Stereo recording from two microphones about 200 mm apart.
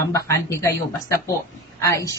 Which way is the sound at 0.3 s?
15° left (ahead or behind).